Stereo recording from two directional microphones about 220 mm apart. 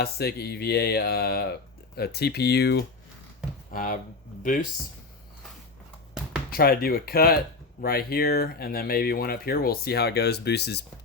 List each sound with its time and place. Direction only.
0.0 s speech: 45° left (ahead or behind)
6.5 s speech: 45° left (ahead or behind)